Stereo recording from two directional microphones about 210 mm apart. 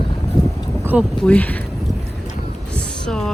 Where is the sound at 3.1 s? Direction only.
Centre (ahead or behind).